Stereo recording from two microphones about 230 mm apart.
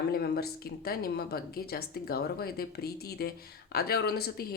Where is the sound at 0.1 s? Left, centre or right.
Left.